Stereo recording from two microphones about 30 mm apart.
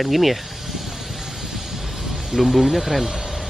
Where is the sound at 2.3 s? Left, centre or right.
Centre.